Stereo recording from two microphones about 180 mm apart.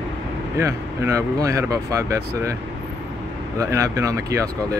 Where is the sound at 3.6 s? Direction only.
15° right (ahead or behind).